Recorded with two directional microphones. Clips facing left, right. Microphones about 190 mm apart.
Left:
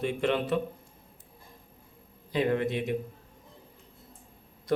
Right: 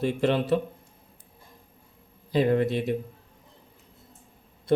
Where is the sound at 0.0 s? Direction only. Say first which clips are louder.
Right 3 dB; 35° right (ahead or behind).